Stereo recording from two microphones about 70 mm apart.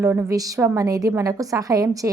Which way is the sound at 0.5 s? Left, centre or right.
Right.